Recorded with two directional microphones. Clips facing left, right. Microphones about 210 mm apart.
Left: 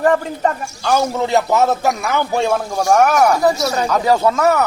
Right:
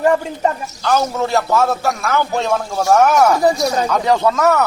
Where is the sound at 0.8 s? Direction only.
10° left (ahead or behind).